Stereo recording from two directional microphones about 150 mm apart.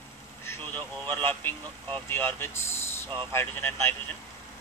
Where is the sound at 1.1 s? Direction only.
15° left (ahead or behind).